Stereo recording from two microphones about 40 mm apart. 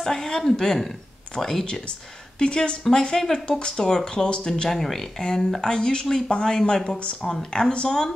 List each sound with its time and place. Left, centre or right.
0.0 s speech: centre
2.3 s speech: left
3.4 s speech: left
3.7 s speech: centre
4.6 s speech: centre